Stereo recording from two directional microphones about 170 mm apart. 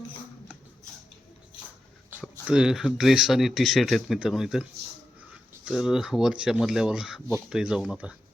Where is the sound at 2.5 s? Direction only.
5° right (ahead or behind).